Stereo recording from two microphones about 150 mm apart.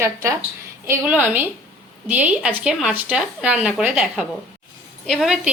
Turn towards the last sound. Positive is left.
turn(degrees=0)  # may be behind; listen again after turning